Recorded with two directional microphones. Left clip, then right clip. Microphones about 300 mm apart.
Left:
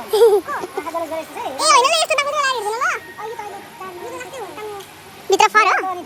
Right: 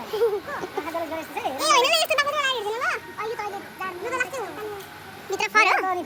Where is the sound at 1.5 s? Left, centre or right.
Centre.